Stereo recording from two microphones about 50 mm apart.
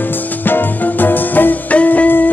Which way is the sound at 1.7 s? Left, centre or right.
Left.